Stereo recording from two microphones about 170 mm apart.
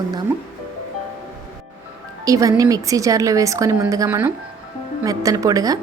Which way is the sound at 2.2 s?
20° right (ahead or behind).